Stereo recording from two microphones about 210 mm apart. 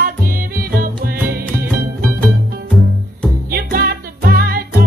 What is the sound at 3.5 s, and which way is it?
Music, 45° right (ahead or behind).